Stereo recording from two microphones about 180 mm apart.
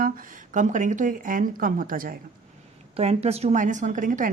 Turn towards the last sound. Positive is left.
turn(degrees=-45)  # may be behind; listen again after turning